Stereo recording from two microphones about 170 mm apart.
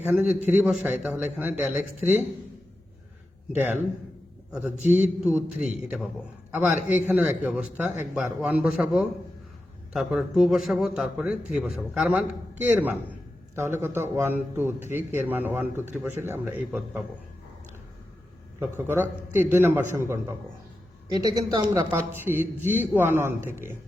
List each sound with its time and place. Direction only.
0.1 s a man's voice: 10° right (ahead or behind)
3.5 s a man's voice: 10° right (ahead or behind)
13.7 s a man's voice: 15° right (ahead or behind)
18.9 s a man's voice: 10° right (ahead or behind)